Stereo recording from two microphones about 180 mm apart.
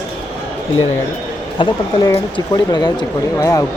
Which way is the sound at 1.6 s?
20° left (ahead or behind).